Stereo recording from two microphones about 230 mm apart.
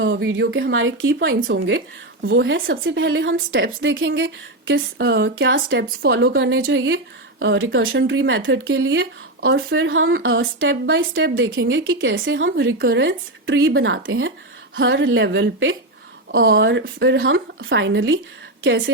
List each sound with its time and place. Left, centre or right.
0.0 s a woman's voice: right